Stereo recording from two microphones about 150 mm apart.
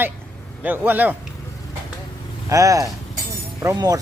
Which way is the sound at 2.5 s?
20° right (ahead or behind).